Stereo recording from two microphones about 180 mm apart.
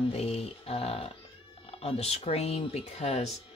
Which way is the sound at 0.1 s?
35° left (ahead or behind).